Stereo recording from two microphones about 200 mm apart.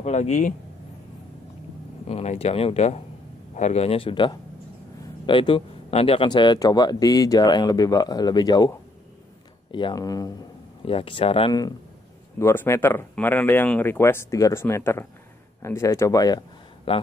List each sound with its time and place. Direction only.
0.0 s speech: 35° left (ahead or behind)
2.0 s speech: 30° left (ahead or behind)